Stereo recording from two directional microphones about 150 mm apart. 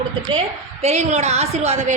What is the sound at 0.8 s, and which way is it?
A woman's voice, 50° right (ahead or behind).